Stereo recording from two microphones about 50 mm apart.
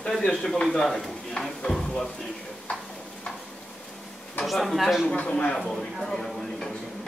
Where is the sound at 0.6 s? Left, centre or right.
Centre.